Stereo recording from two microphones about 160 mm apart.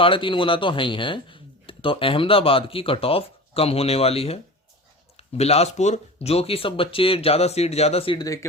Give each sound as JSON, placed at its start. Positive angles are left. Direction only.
{"t": 0.0, "sound": "speech", "side_deg": 35}
{"t": 8.2, "sound": "speech", "side_deg": 20}